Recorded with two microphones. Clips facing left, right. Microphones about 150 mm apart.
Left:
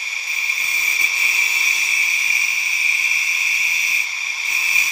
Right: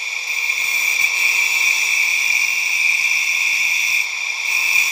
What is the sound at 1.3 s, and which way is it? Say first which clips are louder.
Dental drill: right 1 dB; 25° right (ahead or behind).